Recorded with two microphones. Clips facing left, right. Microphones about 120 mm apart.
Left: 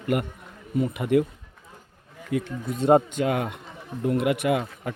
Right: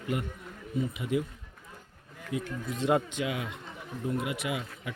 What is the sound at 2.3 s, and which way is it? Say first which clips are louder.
Speech: left 7 dB; 65° left (ahead or behind).